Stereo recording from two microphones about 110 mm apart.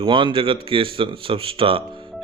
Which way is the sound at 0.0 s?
50° right (ahead or behind).